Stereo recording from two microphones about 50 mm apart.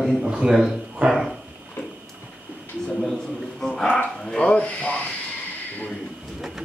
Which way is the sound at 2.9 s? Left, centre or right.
Centre.